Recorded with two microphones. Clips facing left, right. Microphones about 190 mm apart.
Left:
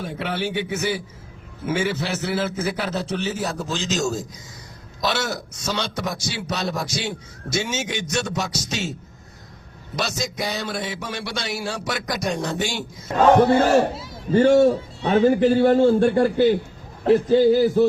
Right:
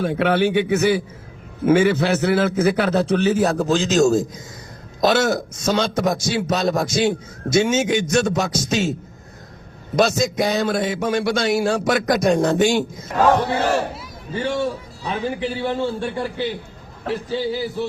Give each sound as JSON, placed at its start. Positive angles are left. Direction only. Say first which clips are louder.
{"t": 0.0, "sound": "a man's voice", "louder": "right 9 dB", "side_deg": -65}
{"t": 9.9, "sound": "a man's voice", "louder": "right 9 dB", "side_deg": -50}
{"t": 14.3, "sound": "a man's voice", "louder": "left 8 dB", "side_deg": 45}